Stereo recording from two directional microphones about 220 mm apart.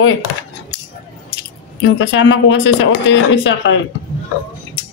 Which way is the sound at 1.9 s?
60° left (ahead or behind).